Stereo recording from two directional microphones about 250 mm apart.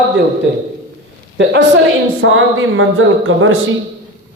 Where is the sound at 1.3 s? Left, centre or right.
Right.